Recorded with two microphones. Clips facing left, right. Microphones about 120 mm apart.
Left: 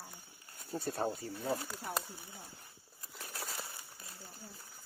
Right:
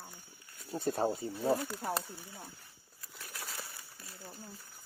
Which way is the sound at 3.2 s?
25° left (ahead or behind).